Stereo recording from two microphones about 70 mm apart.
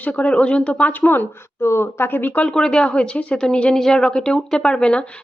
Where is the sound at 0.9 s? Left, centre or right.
Left.